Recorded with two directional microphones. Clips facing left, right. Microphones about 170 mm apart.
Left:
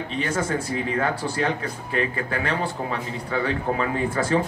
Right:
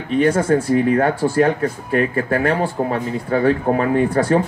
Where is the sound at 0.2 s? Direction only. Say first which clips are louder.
Right 10 dB; 45° right (ahead or behind).